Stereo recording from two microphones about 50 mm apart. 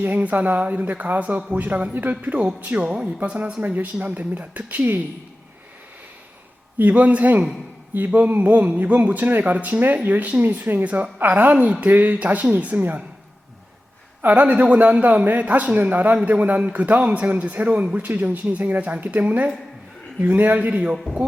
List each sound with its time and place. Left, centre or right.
0.0 s speech: right
3.6 s speech: right
6.7 s speech: right
11.5 s speech: centre
11.9 s speech: right
14.2 s speech: right